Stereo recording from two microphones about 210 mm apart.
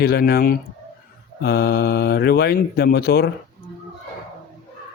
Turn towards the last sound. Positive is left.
turn(degrees=50)  # may be behind; listen again after turning